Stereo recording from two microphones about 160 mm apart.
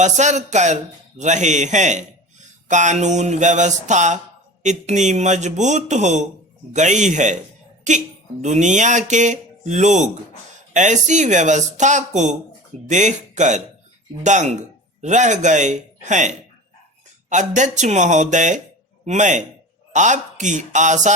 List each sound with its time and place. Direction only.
0.0 s speech: 50° right (ahead or behind)